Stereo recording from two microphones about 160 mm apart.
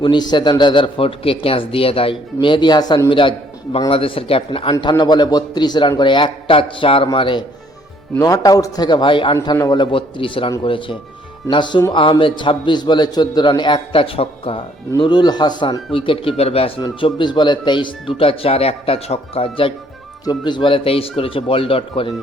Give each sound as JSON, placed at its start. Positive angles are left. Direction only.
{"t": 0.0, "sound": "a man's voice", "side_deg": 30}